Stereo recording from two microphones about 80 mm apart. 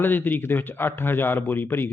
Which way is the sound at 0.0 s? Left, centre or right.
Left.